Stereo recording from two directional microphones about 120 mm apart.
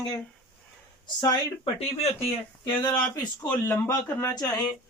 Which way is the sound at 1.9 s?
55° left (ahead or behind).